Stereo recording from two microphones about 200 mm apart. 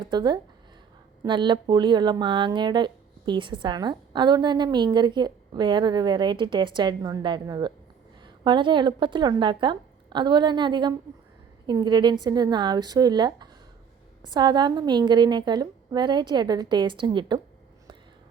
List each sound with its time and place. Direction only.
0.0 s speech: 20° right (ahead or behind)